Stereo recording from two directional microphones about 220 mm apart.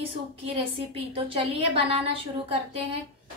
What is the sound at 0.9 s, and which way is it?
Speech, 25° right (ahead or behind).